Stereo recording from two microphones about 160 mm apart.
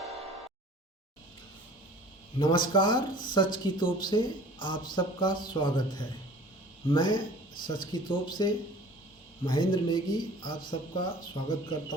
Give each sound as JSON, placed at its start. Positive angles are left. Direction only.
{"t": 2.4, "sound": "speech", "side_deg": 30}